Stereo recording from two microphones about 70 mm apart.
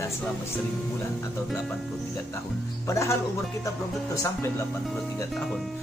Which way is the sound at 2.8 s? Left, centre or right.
Left.